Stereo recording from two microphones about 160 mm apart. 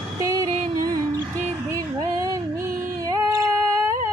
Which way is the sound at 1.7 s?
20° right (ahead or behind).